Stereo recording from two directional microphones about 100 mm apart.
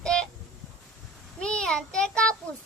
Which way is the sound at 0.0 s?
10° left (ahead or behind).